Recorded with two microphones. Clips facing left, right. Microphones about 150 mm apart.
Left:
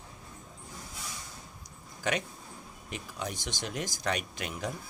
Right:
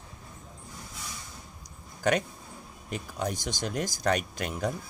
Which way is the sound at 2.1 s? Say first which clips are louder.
Right 6 dB; 45° right (ahead or behind).